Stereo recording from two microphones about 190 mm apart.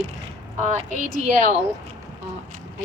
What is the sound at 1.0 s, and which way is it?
Speech, 45° left (ahead or behind).